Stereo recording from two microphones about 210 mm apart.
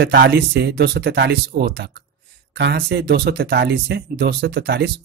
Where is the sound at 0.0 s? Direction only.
50° right (ahead or behind).